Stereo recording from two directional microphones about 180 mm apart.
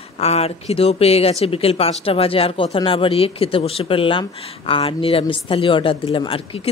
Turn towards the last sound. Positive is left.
turn(degrees=30)  # may be behind; listen again after turning